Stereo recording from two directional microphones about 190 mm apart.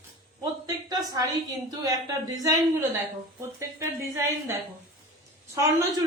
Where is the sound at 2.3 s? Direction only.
20° right (ahead or behind).